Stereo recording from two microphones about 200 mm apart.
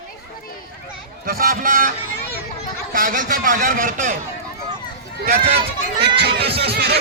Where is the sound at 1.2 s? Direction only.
45° right (ahead or behind).